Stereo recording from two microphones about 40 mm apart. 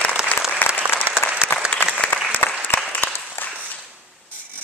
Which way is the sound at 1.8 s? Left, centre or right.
Left.